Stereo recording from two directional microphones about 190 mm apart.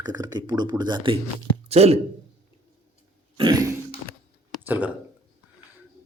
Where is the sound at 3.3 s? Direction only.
25° right (ahead or behind).